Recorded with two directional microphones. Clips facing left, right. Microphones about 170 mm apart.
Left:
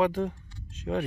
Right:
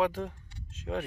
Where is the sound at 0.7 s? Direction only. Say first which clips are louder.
Left 4 dB; centre (ahead or behind).